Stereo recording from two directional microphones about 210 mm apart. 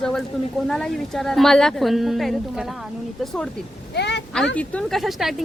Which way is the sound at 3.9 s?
55° left (ahead or behind).